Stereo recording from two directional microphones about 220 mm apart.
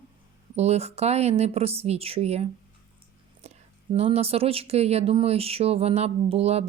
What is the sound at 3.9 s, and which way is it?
Speech, 25° right (ahead or behind).